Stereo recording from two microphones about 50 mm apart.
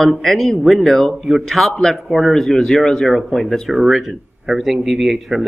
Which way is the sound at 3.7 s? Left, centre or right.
Centre.